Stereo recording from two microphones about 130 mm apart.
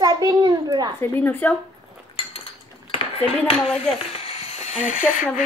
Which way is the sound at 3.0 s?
45° left (ahead or behind).